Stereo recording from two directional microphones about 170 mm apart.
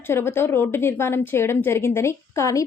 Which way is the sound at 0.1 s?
15° left (ahead or behind).